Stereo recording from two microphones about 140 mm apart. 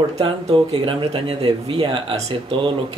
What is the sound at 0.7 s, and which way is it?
Speech, 45° right (ahead or behind).